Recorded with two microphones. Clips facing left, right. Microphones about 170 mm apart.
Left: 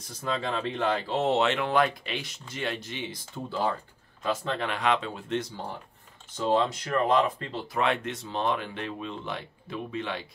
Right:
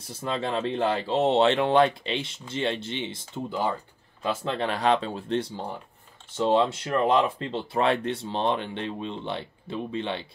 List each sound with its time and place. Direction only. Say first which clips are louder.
0.2 s speech: right 2 dB; 25° right (ahead or behind)
4.3 s speech: right 2 dB; 35° right (ahead or behind)